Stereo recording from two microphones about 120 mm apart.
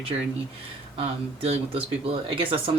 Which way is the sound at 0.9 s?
55° right (ahead or behind).